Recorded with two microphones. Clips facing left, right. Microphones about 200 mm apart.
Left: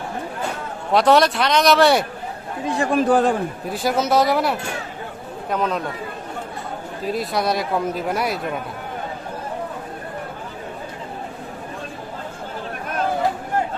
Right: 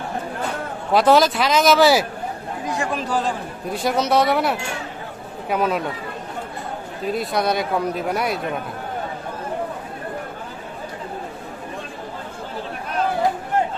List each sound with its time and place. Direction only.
0.9 s speech: centre (ahead or behind)
2.6 s speech: 30° left (ahead or behind)
2.9 s a man's voice: 55° left (ahead or behind)
3.7 s speech: centre (ahead or behind)
7.1 s speech: centre (ahead or behind)